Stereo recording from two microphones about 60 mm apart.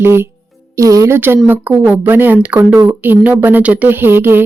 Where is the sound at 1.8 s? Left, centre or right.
Right.